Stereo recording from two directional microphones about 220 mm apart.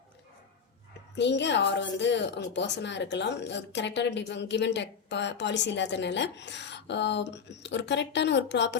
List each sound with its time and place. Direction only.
1.1 s speech: 50° left (ahead or behind)